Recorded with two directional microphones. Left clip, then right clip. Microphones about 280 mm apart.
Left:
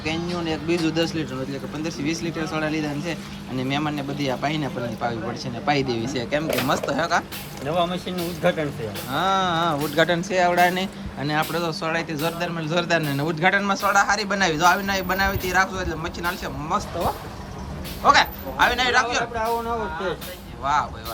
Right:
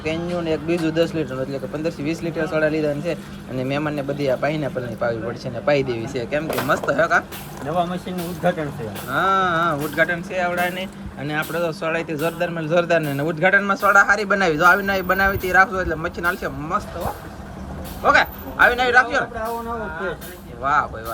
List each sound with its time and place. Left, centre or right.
0.0 s speech: centre
18.0 s speech: centre
20.6 s speech: centre